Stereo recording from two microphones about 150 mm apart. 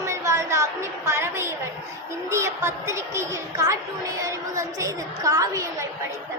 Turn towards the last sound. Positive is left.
turn(degrees=-25)  # may be behind; listen again after turning